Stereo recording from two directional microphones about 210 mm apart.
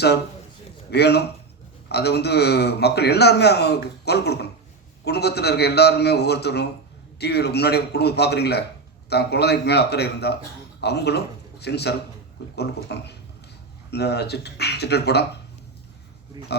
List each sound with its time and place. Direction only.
0.9 s a man's voice: 50° left (ahead or behind)
16.4 s speech: 20° right (ahead or behind)